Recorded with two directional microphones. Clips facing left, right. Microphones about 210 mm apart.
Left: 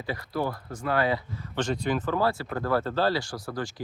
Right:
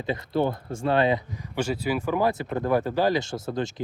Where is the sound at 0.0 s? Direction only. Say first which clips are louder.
Right 5 dB; 20° right (ahead or behind).